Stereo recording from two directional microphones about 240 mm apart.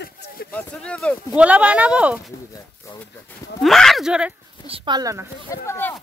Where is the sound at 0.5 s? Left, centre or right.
Centre.